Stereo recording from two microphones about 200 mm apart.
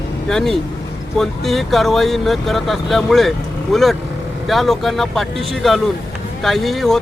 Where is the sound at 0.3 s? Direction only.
Centre (ahead or behind).